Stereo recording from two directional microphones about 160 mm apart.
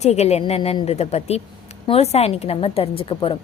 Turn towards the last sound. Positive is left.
turn(degrees=35)  # may be behind; listen again after turning